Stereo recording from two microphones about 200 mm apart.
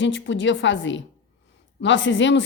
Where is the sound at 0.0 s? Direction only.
70° left (ahead or behind).